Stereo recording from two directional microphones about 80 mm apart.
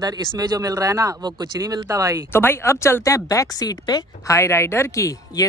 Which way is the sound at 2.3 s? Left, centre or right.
Left.